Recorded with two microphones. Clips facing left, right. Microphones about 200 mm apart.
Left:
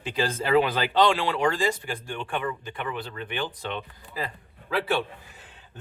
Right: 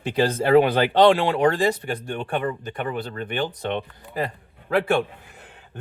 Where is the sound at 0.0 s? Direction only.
60° right (ahead or behind).